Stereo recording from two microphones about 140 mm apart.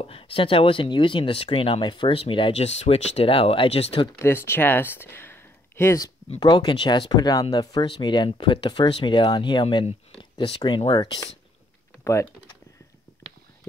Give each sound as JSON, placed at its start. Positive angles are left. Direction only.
{"t": 0.0, "sound": "speech", "side_deg": 40}
{"t": 4.2, "sound": "speech", "side_deg": 15}
{"t": 6.4, "sound": "speech", "side_deg": 30}